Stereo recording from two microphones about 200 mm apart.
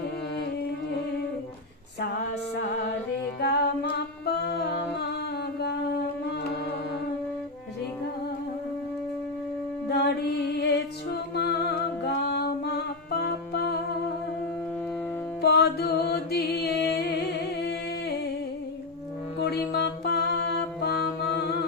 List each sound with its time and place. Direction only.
3.4 s humming: 55° left (ahead or behind)
9.9 s music: 55° left (ahead or behind)
15.4 s music: 55° left (ahead or behind)
19.7 s music: 55° left (ahead or behind)